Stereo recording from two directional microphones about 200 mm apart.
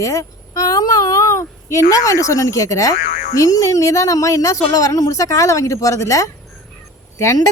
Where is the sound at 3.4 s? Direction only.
15° left (ahead or behind).